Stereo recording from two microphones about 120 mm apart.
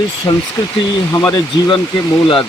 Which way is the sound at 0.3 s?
40° left (ahead or behind).